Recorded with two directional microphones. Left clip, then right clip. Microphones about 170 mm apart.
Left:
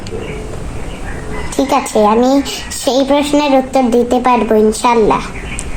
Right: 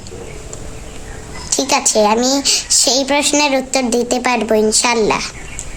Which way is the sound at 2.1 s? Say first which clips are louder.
Left 3 dB; 25° right (ahead or behind).